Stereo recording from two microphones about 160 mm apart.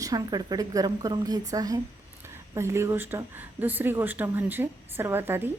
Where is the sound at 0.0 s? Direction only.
25° right (ahead or behind).